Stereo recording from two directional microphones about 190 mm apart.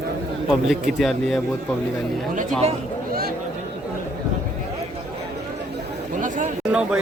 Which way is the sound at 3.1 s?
55° right (ahead or behind).